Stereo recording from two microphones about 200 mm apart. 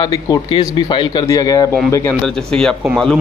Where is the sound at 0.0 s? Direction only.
20° left (ahead or behind).